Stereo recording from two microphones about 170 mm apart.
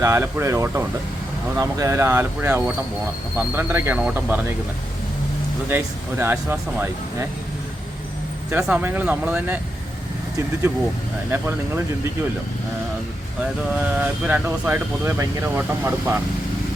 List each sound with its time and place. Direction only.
0.0 s speech: 15° right (ahead or behind)
5.6 s speech: 15° right (ahead or behind)
8.4 s speech: 5° right (ahead or behind)
13.9 s speech: 10° right (ahead or behind)